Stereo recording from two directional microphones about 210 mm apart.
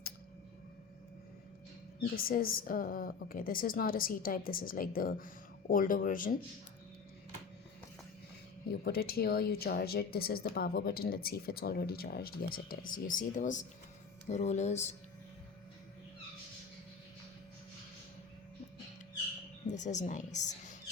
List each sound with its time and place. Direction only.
2.1 s speech: 45° left (ahead or behind)
8.8 s a woman's voice: 45° left (ahead or behind)
19.6 s a woman's voice: 35° left (ahead or behind)